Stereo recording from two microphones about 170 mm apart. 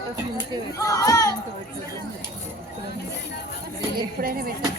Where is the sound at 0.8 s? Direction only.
20° left (ahead or behind).